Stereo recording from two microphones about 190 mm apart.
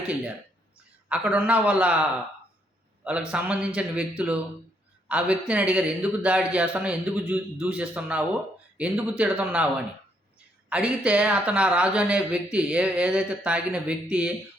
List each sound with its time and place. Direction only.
0.1 s speech: 5° right (ahead or behind)
3.0 s speech: 5° right (ahead or behind)
5.0 s speech: 5° right (ahead or behind)
10.7 s speech: 5° right (ahead or behind)